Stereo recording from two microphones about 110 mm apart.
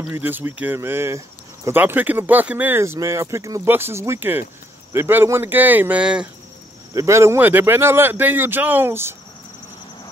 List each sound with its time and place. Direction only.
0.1 s speech: 20° right (ahead or behind)
6.9 s speech: 30° right (ahead or behind)